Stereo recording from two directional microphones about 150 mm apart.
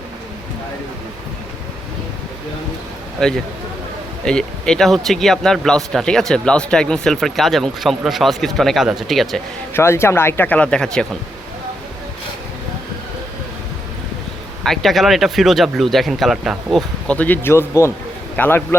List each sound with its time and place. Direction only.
3.2 s speech: centre (ahead or behind)
9.7 s speech: 15° left (ahead or behind)
14.6 s speech: centre (ahead or behind)
17.1 s speech: 10° left (ahead or behind)